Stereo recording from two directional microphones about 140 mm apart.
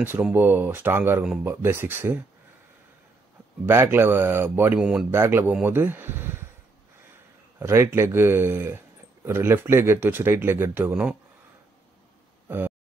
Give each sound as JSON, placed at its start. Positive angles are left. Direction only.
{"t": 0.0, "sound": "speech", "side_deg": -15}
{"t": 1.2, "sound": "speech", "side_deg": -5}
{"t": 1.5, "sound": "speech", "side_deg": -15}
{"t": 3.6, "sound": "speech", "side_deg": -15}
{"t": 5.2, "sound": "speech", "side_deg": -15}
{"t": 7.5, "sound": "speech", "side_deg": -20}
{"t": 12.4, "sound": "a sound", "side_deg": -15}